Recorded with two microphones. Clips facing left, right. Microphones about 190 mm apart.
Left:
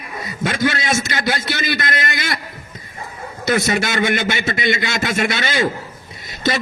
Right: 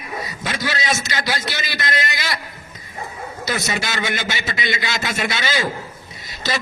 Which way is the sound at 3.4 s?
55° left (ahead or behind).